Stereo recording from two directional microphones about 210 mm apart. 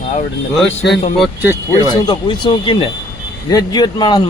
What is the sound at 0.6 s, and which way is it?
Speech, centre (ahead or behind).